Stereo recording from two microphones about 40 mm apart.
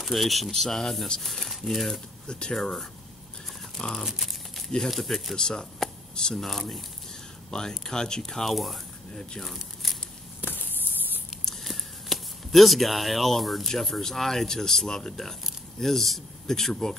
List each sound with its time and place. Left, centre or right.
0.0 s speech: centre
2.2 s speech: left
3.7 s tearing: centre
4.0 s crumpling: centre
4.9 s speech: centre
6.4 s speech: centre
10.4 s a sound: left
11.4 s a sound: centre
13.7 s speech: centre